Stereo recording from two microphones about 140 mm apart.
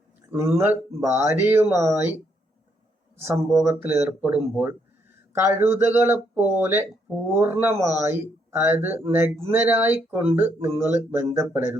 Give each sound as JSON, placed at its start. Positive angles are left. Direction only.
{"t": 0.3, "sound": "speech", "side_deg": -20}
{"t": 3.2, "sound": "speech", "side_deg": -15}